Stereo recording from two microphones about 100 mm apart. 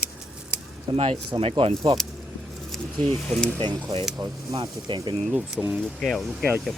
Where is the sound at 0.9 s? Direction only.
75° right (ahead or behind).